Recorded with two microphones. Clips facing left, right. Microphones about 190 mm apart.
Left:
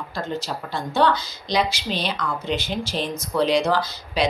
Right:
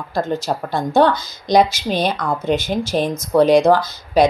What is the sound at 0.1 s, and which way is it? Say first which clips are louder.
Speech: right 9 dB; 50° right (ahead or behind).